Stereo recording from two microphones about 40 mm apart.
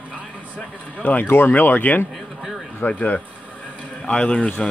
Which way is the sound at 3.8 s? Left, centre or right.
Left.